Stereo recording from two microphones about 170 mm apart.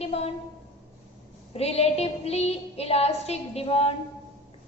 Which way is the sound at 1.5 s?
35° left (ahead or behind).